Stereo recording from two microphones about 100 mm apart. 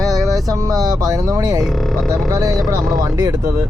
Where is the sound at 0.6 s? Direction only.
35° right (ahead or behind).